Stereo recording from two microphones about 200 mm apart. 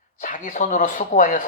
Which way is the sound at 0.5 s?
40° left (ahead or behind).